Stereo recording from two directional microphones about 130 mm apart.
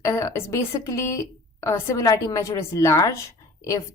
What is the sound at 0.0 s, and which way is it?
A woman's voice, 20° left (ahead or behind).